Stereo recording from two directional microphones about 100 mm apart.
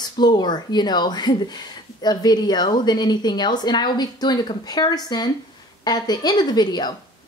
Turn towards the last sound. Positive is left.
turn(degrees=45)  # may be behind; listen again after turning